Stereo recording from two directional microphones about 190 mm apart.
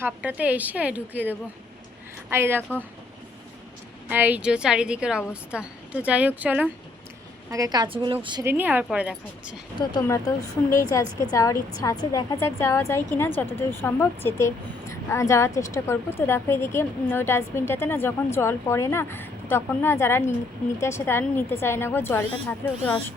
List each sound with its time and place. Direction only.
0.0 s a woman's voice: 10° right (ahead or behind)
2.3 s a woman's voice: 10° right (ahead or behind)
4.1 s a woman's voice: 10° right (ahead or behind)
7.5 s speech: 20° right (ahead or behind)
8.4 s a woman's voice: 10° right (ahead or behind)
9.7 s a woman's voice: 20° left (ahead or behind)